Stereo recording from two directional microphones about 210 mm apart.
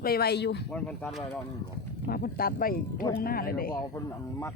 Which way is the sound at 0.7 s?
5° left (ahead or behind).